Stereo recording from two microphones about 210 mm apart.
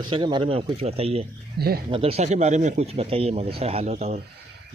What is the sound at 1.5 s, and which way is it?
Speech, 50° right (ahead or behind).